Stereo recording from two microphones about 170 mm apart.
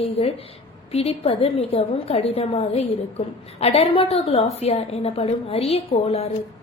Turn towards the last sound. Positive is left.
turn(degrees=35)  # may be behind; listen again after turning